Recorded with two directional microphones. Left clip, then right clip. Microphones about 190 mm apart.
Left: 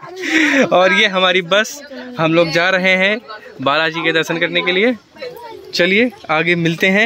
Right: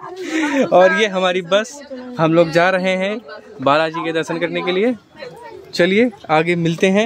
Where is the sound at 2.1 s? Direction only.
15° right (ahead or behind).